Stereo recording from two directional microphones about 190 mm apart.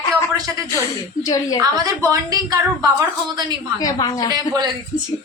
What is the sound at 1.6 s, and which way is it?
A woman's voice, 20° right (ahead or behind).